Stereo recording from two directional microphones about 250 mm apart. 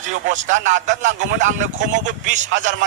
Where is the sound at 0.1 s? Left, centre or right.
Right.